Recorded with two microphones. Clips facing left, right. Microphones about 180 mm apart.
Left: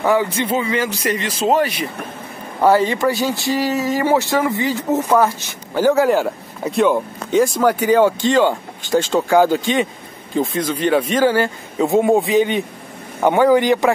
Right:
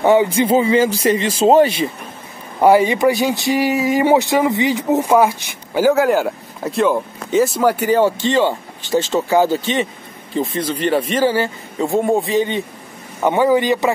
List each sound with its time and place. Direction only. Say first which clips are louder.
0.0 s speech: right 4 dB; 20° right (ahead or behind)
2.6 s speech: right 3 dB; 15° right (ahead or behind)